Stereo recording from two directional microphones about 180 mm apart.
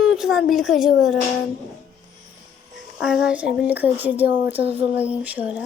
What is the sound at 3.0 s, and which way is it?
A woman's voice, 5° right (ahead or behind).